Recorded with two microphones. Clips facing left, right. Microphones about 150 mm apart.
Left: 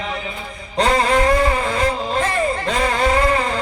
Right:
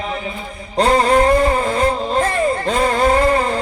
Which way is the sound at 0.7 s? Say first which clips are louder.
Right 3 dB; 35° right (ahead or behind).